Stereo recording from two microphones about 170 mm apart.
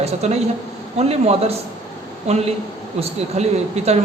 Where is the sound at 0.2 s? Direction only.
40° right (ahead or behind).